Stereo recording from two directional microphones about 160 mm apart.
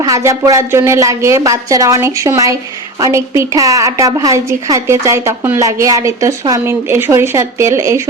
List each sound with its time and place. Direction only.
0.0 s a woman's voice: 20° right (ahead or behind)